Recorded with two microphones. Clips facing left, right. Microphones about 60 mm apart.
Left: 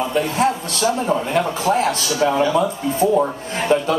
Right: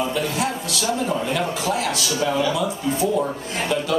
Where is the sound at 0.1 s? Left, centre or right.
Left.